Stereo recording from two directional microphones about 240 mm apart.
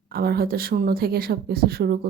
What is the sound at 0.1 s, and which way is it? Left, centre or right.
Speech, right.